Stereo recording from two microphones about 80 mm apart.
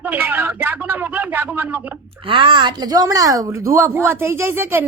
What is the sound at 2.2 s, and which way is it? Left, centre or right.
A woman's voice, right.